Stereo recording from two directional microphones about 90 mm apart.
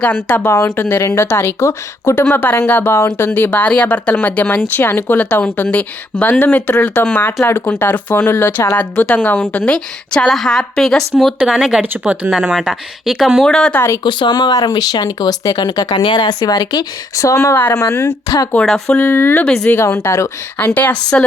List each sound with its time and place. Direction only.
0.0 s a woman's voice: 15° left (ahead or behind)
0.4 s a woman's voice: 35° left (ahead or behind); by 11.5 s 5° left (ahead or behind)
11.5 s speech: 5° right (ahead or behind)
13.7 s a woman's voice: 30° left (ahead or behind)
14.0 s speech: 60° left (ahead or behind)
16.0 s a woman's voice: 60° left (ahead or behind); by 18.4 s 40° left (ahead or behind)
18.6 s speech: 5° left (ahead or behind)
18.9 s speech: 25° left (ahead or behind)
19.5 s a woman's voice: 10° left (ahead or behind)
19.7 s a woman's voice: 30° left (ahead or behind)
20.6 s a woman's voice: 20° left (ahead or behind)